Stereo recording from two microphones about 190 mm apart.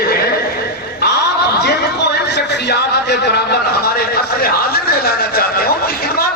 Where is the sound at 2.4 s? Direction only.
60° left (ahead or behind).